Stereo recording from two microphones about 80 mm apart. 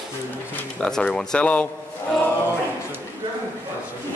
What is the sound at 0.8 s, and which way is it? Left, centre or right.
Speech, centre.